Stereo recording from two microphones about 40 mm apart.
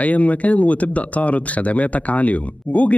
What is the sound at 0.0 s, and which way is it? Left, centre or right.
Speech, left.